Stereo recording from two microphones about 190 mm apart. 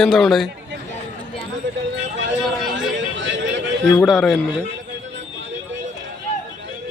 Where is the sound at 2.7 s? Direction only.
75° right (ahead or behind).